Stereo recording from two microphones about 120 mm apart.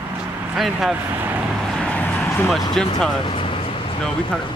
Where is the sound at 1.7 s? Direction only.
10° left (ahead or behind).